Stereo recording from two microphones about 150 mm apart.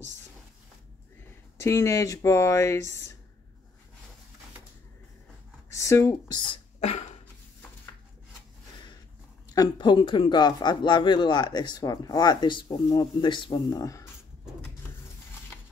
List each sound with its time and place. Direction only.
1.6 s speech: 20° left (ahead or behind)
5.7 s speech: 20° left (ahead or behind)
9.6 s speech: 30° left (ahead or behind)